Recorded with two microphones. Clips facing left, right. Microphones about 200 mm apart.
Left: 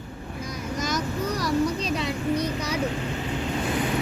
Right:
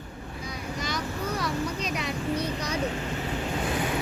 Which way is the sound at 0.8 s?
45° left (ahead or behind).